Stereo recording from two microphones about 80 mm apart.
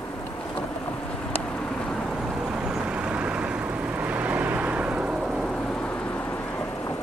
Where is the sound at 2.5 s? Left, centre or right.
Centre.